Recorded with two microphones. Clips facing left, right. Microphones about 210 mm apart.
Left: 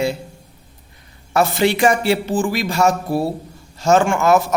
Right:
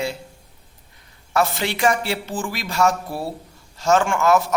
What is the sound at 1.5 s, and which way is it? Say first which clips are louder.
Speech: left 5 dB; 5° left (ahead or behind).